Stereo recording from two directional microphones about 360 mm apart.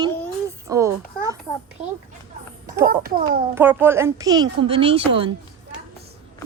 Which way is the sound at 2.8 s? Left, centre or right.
Right.